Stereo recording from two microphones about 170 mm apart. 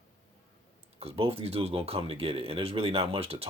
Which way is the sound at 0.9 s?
35° right (ahead or behind).